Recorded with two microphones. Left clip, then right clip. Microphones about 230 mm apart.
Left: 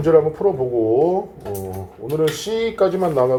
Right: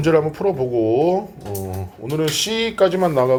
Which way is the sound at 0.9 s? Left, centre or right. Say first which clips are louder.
Left 1 dB; right.